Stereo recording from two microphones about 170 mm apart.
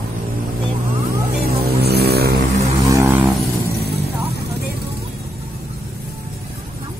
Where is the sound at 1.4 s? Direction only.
65° right (ahead or behind).